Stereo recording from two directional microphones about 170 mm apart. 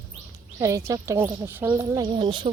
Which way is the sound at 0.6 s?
20° right (ahead or behind).